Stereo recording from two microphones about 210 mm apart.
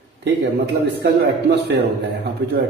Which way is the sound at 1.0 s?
50° right (ahead or behind).